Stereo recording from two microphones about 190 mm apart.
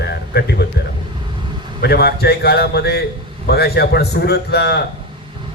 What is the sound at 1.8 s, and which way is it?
Speech, 55° left (ahead or behind).